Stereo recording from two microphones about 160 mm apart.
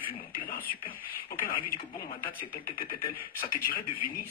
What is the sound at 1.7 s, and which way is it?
A man's voice, 65° left (ahead or behind).